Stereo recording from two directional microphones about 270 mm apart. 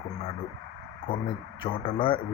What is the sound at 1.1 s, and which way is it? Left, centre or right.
Speech, centre.